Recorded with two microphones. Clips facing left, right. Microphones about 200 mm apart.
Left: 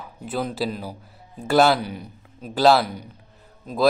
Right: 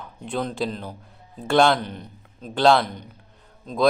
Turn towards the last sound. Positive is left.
turn(degrees=5)  # may be behind; listen again after turning